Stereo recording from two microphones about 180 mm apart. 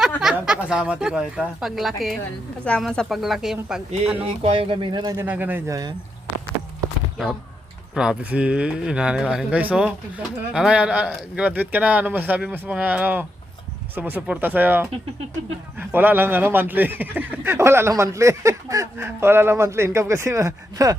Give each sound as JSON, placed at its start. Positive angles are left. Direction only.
{"t": 0.2, "sound": "speech", "side_deg": -5}
{"t": 4.2, "sound": "speech", "side_deg": -35}
{"t": 5.1, "sound": "speech", "side_deg": -10}
{"t": 7.9, "sound": "speech", "side_deg": -5}